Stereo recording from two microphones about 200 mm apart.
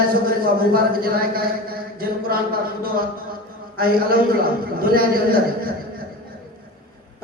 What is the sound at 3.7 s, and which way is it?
A man's voice, 45° right (ahead or behind).